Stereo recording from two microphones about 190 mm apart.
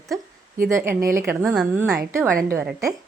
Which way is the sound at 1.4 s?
5° right (ahead or behind).